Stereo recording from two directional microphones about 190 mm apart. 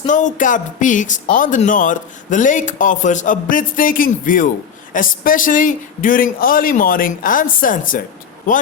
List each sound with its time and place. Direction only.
0.0 s speech: 40° left (ahead or behind)